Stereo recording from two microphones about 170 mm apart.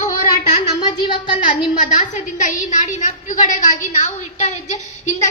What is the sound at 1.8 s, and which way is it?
A woman's voice, 45° left (ahead or behind).